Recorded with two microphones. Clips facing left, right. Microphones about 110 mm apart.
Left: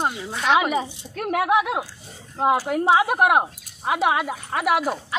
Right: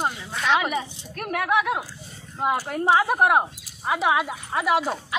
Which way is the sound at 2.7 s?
10° left (ahead or behind).